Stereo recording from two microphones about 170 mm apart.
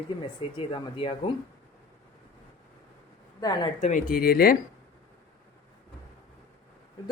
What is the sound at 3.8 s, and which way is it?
Speech, 45° left (ahead or behind).